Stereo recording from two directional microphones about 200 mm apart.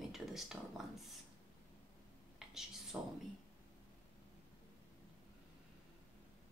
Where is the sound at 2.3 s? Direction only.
Centre (ahead or behind).